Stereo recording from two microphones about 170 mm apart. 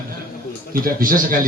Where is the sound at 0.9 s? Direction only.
55° right (ahead or behind).